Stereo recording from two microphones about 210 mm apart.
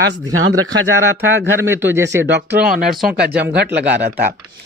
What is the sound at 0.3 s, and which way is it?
Speech, 80° right.